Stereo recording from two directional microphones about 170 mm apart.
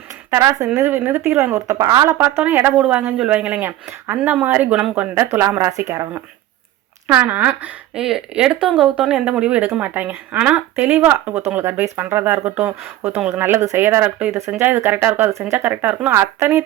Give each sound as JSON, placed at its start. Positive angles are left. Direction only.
{"t": 0.3, "sound": "speech", "side_deg": -20}